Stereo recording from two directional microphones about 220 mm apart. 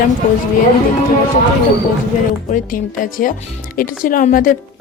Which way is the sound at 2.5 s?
40° left (ahead or behind).